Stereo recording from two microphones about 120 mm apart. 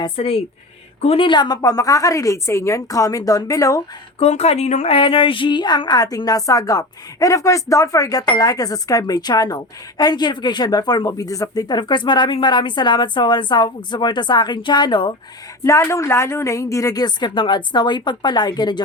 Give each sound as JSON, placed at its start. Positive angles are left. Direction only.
{"t": 0.0, "sound": "a woman's voice", "side_deg": 55}
{"t": 1.3, "sound": "a woman's voice", "side_deg": 35}
{"t": 4.2, "sound": "a woman's voice", "side_deg": 60}
{"t": 15.6, "sound": "a woman's voice", "side_deg": 25}